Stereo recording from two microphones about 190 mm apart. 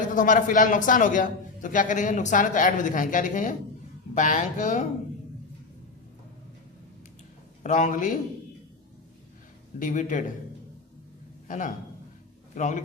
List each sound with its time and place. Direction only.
0.1 s a man's voice: 45° left (ahead or behind)
7.6 s speech: 40° left (ahead or behind)
9.7 s a man's voice: 40° left (ahead or behind)
11.4 s a man's voice: 40° left (ahead or behind)